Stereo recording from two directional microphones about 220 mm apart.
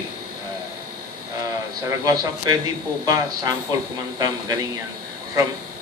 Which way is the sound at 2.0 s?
15° right (ahead or behind).